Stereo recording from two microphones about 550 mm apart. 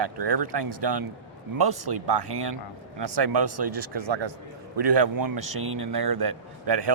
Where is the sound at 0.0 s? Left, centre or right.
Right.